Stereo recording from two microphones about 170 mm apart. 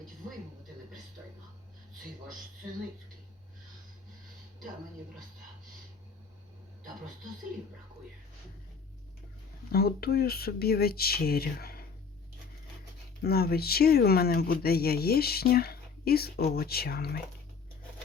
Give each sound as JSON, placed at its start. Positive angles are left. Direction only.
{"t": 9.7, "sound": "speech", "side_deg": 65}
{"t": 13.2, "sound": "speech", "side_deg": 65}